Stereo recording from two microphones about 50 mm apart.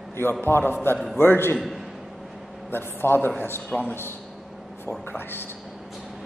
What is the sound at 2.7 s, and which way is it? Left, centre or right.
Speech, left.